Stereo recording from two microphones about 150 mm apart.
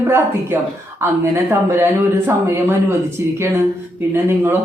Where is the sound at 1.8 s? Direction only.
15° right (ahead or behind).